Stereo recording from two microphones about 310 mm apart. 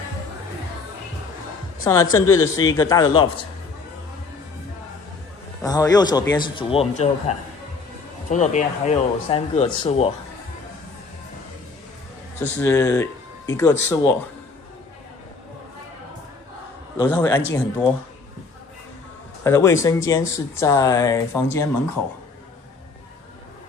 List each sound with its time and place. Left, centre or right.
2.1 s speech: centre
5.6 s speech: centre
12.4 s speech: centre
17.0 s speech: centre
19.4 s speech: centre